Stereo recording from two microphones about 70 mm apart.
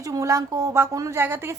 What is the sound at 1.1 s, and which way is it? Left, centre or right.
Speech, right.